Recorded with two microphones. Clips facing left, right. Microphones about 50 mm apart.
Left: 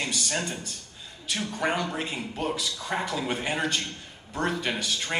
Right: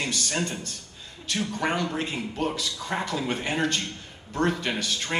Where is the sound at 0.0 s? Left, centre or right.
Centre.